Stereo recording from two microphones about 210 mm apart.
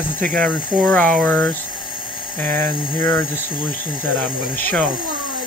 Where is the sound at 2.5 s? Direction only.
25° left (ahead or behind).